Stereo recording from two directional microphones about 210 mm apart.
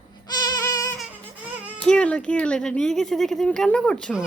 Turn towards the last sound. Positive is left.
turn(degrees=5)  # may be behind; listen again after turning